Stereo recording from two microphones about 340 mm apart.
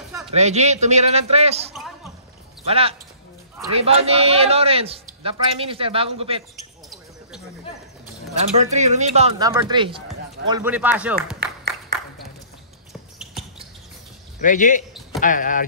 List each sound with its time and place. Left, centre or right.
0.3 s a man's voice: centre
8.5 s a man's voice: centre
13.2 s a sound: centre
14.4 s speech: left